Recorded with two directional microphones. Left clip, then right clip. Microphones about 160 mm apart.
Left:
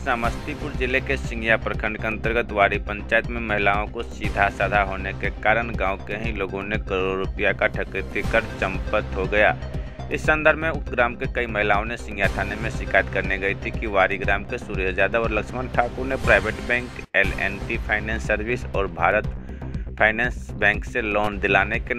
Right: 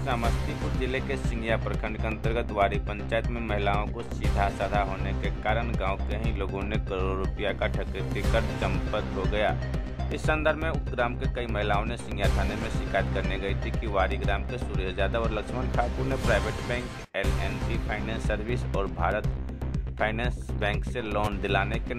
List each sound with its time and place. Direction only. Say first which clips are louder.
0.0 s speech: left 6 dB; 25° left (ahead or behind)